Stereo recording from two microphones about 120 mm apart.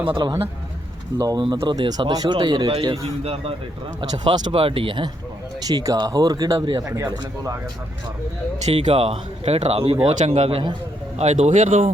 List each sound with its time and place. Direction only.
0.1 s speech: 40° right (ahead or behind)
2.9 s speech: 55° right (ahead or behind)
4.1 s speech: 35° right (ahead or behind)
4.5 s speech: 50° right (ahead or behind)
5.6 s speech: 30° right (ahead or behind)
6.9 s speech: 25° right (ahead or behind)
8.6 s speech: 65° right (ahead or behind)
11.2 s a man's voice: 75° right (ahead or behind)